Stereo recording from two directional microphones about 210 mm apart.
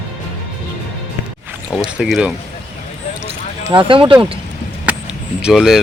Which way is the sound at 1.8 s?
5° right (ahead or behind).